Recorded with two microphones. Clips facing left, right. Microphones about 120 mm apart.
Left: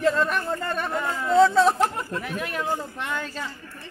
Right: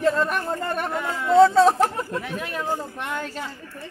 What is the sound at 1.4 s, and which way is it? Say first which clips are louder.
Speech: right 3 dB; 40° right (ahead or behind).